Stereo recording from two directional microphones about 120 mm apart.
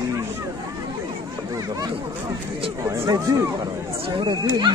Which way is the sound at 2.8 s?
25° right (ahead or behind).